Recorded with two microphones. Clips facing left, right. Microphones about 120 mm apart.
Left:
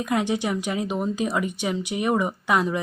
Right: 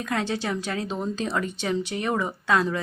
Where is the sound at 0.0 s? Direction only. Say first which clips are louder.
Left 3 dB; 15° left (ahead or behind).